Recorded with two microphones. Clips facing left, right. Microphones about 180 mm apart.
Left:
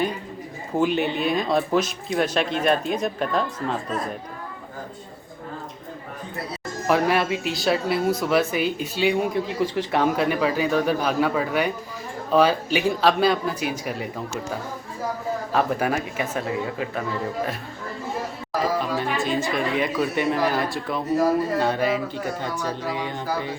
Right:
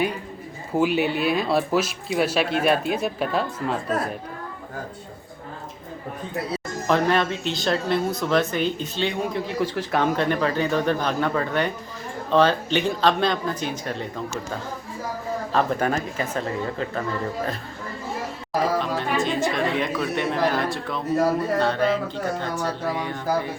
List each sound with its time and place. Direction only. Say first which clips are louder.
0.8 s speech: right 1 dB; 5° right (ahead or behind)
6.8 s speech: even; 5° left (ahead or behind)
15.5 s speech: even; 5° left (ahead or behind)
18.8 s speech: right 1 dB; centre (ahead or behind); by 22.7 s 20° left (ahead or behind)
22.9 s music: right 2 dB; 20° left (ahead or behind)